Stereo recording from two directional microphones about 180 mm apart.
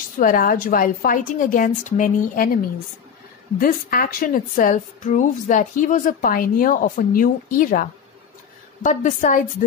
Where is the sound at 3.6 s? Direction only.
55° left (ahead or behind).